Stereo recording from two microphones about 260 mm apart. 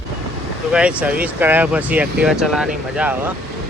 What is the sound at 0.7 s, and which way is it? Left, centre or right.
Speech, centre.